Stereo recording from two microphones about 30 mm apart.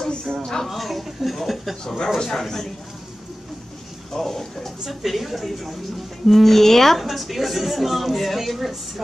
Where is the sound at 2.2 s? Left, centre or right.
Centre.